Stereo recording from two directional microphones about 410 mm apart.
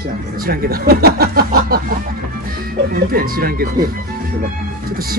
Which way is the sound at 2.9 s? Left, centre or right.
Right.